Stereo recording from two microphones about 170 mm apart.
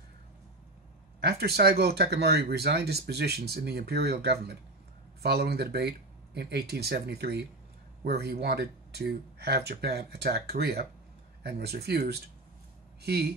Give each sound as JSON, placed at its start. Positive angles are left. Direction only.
{"t": 1.2, "sound": "speech", "side_deg": -70}